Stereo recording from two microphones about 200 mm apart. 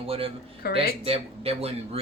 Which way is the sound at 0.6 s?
50° left (ahead or behind).